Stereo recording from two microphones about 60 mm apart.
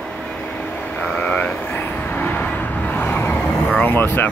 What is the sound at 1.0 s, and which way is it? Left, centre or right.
Vehicle, left.